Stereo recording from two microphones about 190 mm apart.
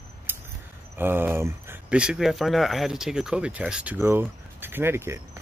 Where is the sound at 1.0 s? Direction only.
10° right (ahead or behind).